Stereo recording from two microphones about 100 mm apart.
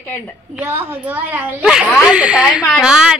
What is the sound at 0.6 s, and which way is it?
A woman's voice, 25° right (ahead or behind).